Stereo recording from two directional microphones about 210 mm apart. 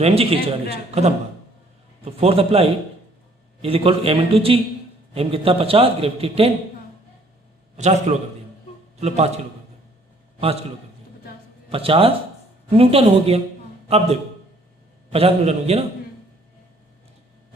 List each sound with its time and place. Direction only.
0.0 s a man's voice: 30° right (ahead or behind)
7.8 s a man's voice: 35° right (ahead or behind)
11.7 s a man's voice: 25° right (ahead or behind)